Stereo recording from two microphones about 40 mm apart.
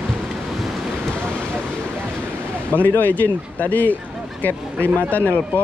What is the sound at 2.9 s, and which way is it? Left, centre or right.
Speech, left.